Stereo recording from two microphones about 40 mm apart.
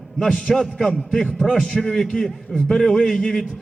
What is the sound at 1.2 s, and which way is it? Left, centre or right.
A man's voice, centre.